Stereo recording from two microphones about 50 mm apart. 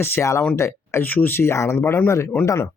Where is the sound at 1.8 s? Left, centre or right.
Left.